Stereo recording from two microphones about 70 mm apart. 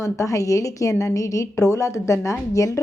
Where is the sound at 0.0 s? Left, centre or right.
Left.